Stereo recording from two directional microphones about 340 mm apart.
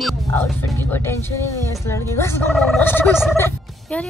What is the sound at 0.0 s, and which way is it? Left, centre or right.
Speech, centre.